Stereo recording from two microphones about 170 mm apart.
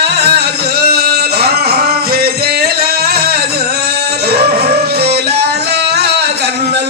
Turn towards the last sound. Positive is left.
turn(degrees=-75)  # may be behind; listen again after turning